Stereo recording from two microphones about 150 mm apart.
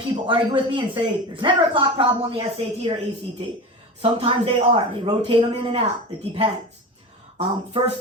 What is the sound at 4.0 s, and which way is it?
Speech, 40° right (ahead or behind).